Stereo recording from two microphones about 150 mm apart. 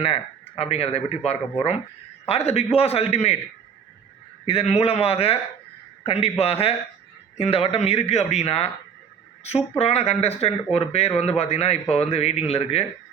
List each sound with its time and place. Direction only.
0.0 s speech: 40° left (ahead or behind)
4.4 s speech: 45° left (ahead or behind)
9.7 s speech: 45° left (ahead or behind)